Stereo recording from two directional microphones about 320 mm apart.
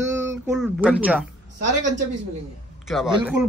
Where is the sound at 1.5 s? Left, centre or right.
Right.